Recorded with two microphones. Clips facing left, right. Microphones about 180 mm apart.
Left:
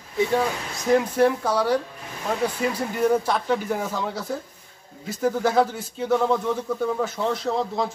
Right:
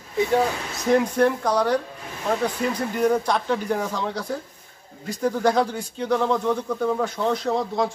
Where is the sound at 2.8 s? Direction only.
5° left (ahead or behind).